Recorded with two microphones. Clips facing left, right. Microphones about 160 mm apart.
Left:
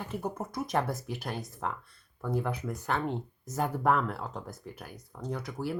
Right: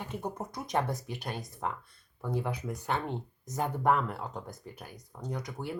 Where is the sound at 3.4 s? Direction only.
5° left (ahead or behind).